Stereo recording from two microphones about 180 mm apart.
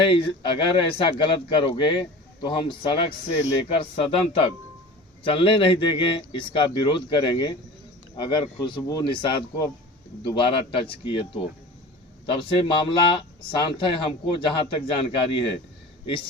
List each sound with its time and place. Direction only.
0.0 s a man's voice: 25° left (ahead or behind)